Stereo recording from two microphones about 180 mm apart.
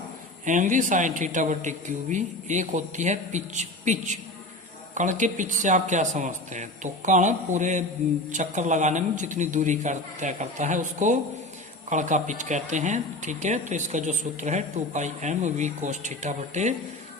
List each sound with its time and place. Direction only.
0.4 s speech: 45° right (ahead or behind)